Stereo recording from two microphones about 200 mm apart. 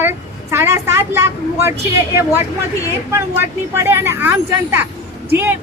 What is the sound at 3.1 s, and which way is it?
Speech, 10° right (ahead or behind).